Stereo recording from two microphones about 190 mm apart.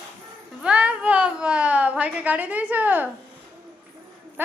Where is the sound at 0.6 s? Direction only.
5° right (ahead or behind).